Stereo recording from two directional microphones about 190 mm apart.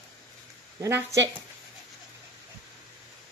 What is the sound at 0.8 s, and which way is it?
Speech, 15° right (ahead or behind).